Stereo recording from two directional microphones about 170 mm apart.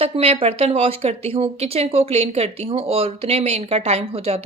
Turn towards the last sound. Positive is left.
turn(degrees=-35)  # may be behind; listen again after turning